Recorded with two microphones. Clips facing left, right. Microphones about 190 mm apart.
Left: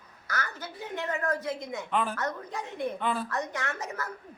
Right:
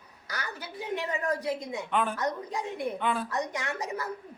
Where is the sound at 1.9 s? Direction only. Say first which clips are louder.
Right 1 dB; centre (ahead or behind).